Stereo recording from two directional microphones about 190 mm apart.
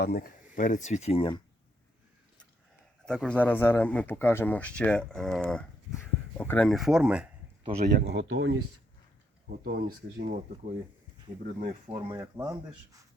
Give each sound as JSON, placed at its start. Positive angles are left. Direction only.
{"t": 0.0, "sound": "speech", "side_deg": 55}
{"t": 3.1, "sound": "speech", "side_deg": 5}
{"t": 7.6, "sound": "speech", "side_deg": -35}
{"t": 7.9, "sound": "speech", "side_deg": -60}
{"t": 9.6, "sound": "speech", "side_deg": -55}
{"t": 11.4, "sound": "speech", "side_deg": -35}
{"t": 11.9, "sound": "speech", "side_deg": -25}